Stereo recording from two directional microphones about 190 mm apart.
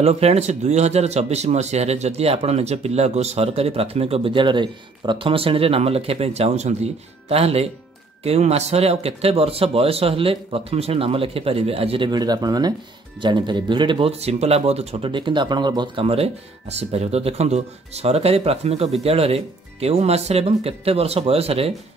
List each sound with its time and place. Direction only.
0.0 s speech: 35° right (ahead or behind)